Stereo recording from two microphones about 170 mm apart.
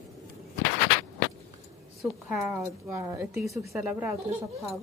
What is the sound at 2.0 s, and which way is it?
Speech, 5° right (ahead or behind).